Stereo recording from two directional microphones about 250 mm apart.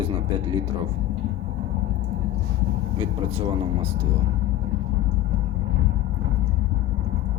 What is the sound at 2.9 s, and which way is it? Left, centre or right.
Speech, right.